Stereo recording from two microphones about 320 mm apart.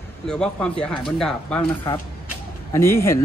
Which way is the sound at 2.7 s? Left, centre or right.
Centre.